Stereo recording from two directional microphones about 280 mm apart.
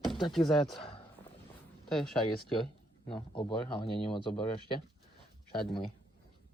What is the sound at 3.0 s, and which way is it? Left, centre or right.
Speech, centre.